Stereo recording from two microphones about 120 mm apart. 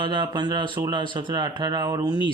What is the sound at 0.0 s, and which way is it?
Speech, 40° right (ahead or behind).